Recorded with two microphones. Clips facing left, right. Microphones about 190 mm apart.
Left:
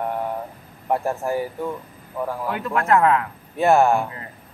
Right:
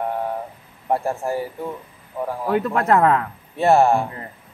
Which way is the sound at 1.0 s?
30° right (ahead or behind).